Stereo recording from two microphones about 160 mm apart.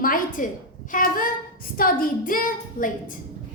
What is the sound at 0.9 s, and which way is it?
A woman's voice, 60° left (ahead or behind).